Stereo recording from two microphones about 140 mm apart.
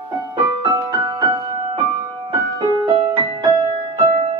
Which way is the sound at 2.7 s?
30° right (ahead or behind).